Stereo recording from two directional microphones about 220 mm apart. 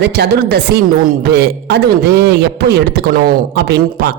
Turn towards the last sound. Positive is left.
turn(degrees=-50)  # may be behind; listen again after turning